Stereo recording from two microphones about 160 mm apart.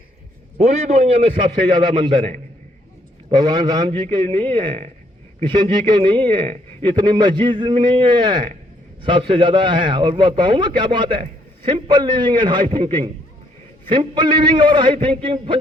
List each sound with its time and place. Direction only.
0.6 s a man's voice: 40° right (ahead or behind)